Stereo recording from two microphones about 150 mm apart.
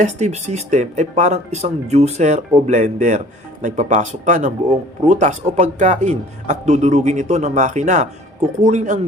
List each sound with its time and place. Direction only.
0.0 s speech: 50° right (ahead or behind)